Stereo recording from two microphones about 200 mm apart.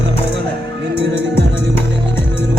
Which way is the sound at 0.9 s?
60° right (ahead or behind).